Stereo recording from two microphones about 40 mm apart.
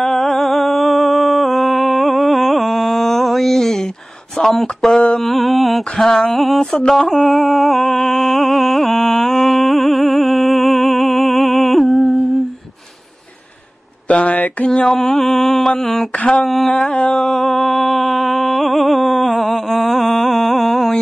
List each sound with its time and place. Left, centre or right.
0.0 s a sound: centre
4.4 s speech: centre
4.9 s mantra: left
5.2 s mantra: centre
7.2 s music: centre
14.0 s speech: left
14.7 s mantra: left
15.1 s speech: centre
16.1 s mantra: left
17.3 s a sound: centre